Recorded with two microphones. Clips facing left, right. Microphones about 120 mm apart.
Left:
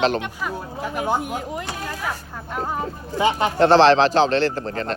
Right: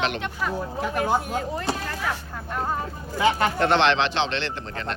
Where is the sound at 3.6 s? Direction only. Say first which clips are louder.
Left 9 dB; 35° left (ahead or behind).